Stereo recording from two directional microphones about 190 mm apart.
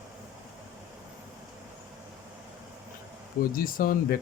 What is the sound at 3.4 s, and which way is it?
Speech, 50° left (ahead or behind).